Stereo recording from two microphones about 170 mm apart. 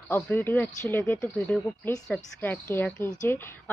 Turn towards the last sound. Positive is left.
turn(degrees=10)  # may be behind; listen again after turning